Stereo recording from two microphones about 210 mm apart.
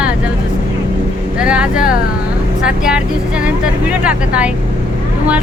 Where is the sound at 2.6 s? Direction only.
5° right (ahead or behind).